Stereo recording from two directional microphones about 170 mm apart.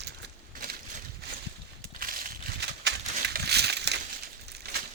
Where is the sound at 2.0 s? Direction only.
55° right (ahead or behind); by 3.9 s 85° right.